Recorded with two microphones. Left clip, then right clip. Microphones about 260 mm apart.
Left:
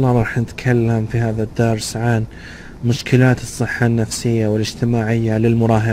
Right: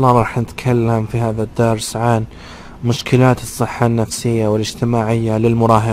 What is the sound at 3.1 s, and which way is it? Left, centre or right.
Speech, centre.